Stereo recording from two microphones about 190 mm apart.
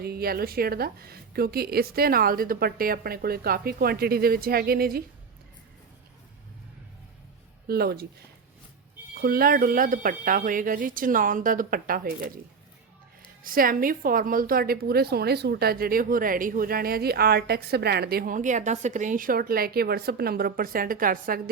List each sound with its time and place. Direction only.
0.0 s a woman's voice: 55° right (ahead or behind)
7.7 s a woman's voice: 55° right (ahead or behind)
9.2 s a woman's voice: 50° right (ahead or behind)
13.4 s a woman's voice: 45° right (ahead or behind)